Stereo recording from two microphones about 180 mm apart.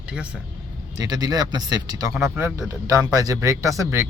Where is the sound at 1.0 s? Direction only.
20° right (ahead or behind).